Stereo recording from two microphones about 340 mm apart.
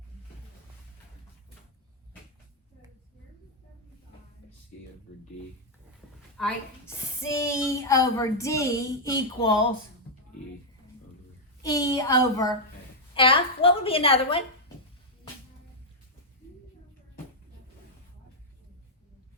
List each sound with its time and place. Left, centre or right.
6.3 s a woman's voice: centre
11.6 s a woman's voice: centre